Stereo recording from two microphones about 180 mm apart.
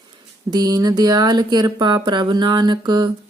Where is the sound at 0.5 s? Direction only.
20° right (ahead or behind).